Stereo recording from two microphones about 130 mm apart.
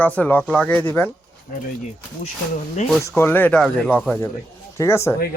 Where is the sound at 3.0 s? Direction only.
20° left (ahead or behind).